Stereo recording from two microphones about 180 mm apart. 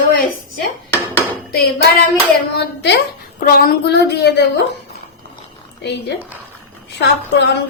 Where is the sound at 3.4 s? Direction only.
55° left (ahead or behind).